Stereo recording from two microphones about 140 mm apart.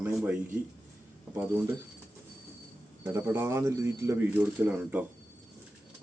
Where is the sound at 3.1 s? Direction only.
15° right (ahead or behind).